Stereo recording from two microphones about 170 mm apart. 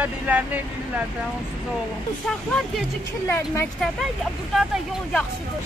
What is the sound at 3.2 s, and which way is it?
Speech, 15° left (ahead or behind).